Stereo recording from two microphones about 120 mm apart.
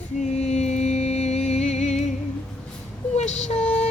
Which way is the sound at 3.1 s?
75° left (ahead or behind).